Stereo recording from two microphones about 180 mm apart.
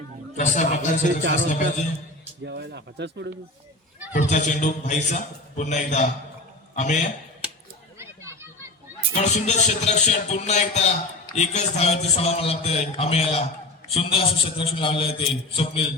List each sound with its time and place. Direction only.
0.3 s a man's voice: 40° left (ahead or behind)
2.4 s speech: 70° right (ahead or behind)
4.1 s a man's voice: 45° left (ahead or behind)
7.9 s a sound: 15° right (ahead or behind)
9.1 s a man's voice: 40° left (ahead or behind)